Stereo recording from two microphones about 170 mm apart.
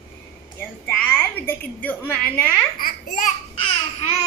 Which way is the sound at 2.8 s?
60° left (ahead or behind).